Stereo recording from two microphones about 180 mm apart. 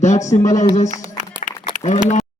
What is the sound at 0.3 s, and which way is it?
Speech, 45° left (ahead or behind).